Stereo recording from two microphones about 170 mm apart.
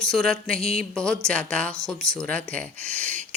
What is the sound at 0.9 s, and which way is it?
Speech, 5° left (ahead or behind).